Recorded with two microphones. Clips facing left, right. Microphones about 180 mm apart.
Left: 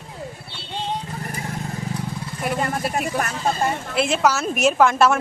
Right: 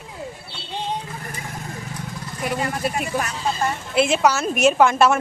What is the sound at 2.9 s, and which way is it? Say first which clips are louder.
Speech: left 1 dB; 45° left (ahead or behind).